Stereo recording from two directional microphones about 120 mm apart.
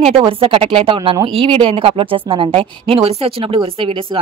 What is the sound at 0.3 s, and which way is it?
Speech, 50° right (ahead or behind).